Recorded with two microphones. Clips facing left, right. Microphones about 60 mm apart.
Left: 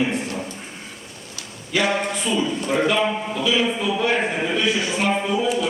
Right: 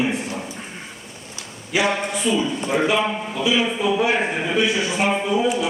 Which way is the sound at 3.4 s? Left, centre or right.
Centre.